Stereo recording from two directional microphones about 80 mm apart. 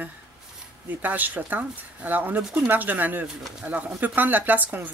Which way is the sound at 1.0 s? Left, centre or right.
Right.